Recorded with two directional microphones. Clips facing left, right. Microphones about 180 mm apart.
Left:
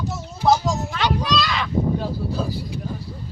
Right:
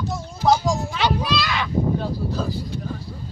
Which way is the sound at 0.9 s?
10° right (ahead or behind).